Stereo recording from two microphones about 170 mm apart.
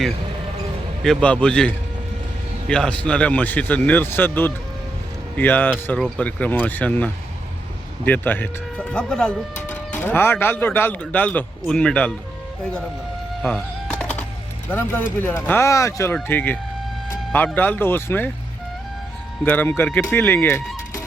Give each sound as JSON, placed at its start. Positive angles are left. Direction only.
{"t": 1.0, "sound": "a man's voice", "side_deg": 5}
{"t": 13.4, "sound": "speech", "side_deg": 0}
{"t": 14.0, "sound": "music", "side_deg": 5}
{"t": 14.7, "sound": "speech", "side_deg": 10}
{"t": 19.5, "sound": "speech", "side_deg": 10}